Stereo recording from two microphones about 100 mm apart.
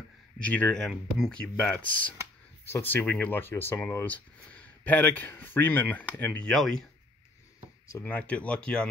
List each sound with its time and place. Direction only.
0.4 s speech: 15° left (ahead or behind)
4.0 s speech: 15° left (ahead or behind)
8.0 s speech: 15° left (ahead or behind)